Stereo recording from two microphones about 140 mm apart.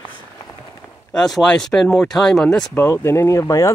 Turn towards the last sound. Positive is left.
turn(degrees=25)  # may be behind; listen again after turning